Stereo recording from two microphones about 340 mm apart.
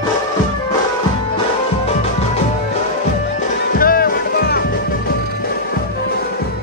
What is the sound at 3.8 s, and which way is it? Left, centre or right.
Music, left.